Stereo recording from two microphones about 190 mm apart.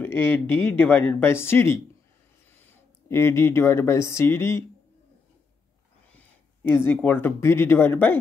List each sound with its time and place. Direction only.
0.0 s speech: 10° left (ahead or behind)
6.1 s speech: 10° left (ahead or behind)